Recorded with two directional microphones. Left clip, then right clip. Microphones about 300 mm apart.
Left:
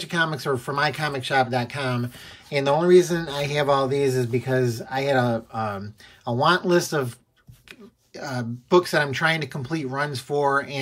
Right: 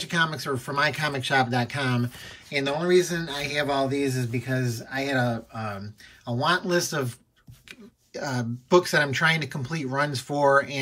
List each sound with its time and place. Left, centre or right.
0.0 s speech: centre